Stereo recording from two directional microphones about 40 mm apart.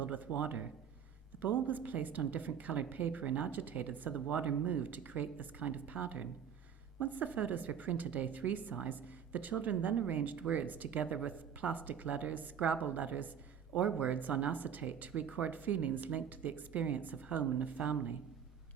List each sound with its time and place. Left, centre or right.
0.3 s speech: right
1.6 s a woman's voice: right